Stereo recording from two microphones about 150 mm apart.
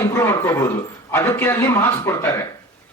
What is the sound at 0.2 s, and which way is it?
Speech, 15° left (ahead or behind).